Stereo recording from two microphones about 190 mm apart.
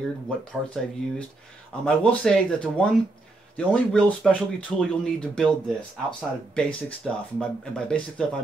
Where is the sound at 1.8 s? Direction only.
5° left (ahead or behind).